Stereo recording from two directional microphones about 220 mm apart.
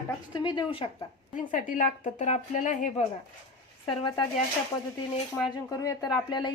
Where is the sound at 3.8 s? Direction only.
20° left (ahead or behind).